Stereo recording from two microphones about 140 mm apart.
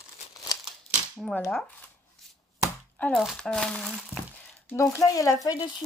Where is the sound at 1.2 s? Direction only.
5° left (ahead or behind).